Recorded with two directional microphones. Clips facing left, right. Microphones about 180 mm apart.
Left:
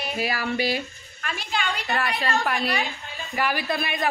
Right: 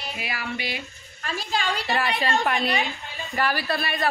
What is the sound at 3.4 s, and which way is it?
Speech, 15° left (ahead or behind).